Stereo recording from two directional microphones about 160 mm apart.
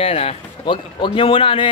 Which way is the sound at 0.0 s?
40° left (ahead or behind).